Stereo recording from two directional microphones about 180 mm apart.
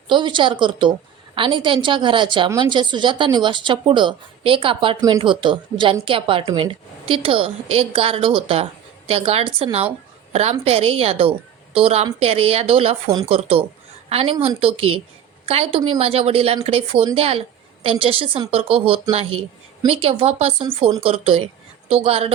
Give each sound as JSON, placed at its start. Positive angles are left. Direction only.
{"t": 0.1, "sound": "a woman's voice", "side_deg": -25}